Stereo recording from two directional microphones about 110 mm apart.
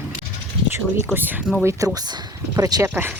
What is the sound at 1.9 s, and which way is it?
Speech, 35° right (ahead or behind).